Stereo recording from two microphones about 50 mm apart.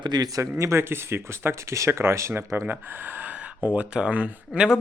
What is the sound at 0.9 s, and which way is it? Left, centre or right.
Speech, right.